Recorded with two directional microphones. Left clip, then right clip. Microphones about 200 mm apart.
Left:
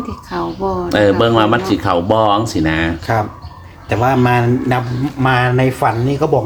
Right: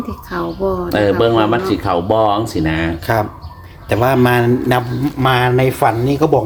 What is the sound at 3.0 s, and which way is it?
A man's voice, 40° right (ahead or behind).